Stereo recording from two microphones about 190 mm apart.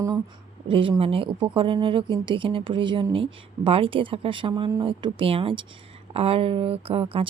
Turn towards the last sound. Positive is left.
turn(degrees=-30)  # may be behind; listen again after turning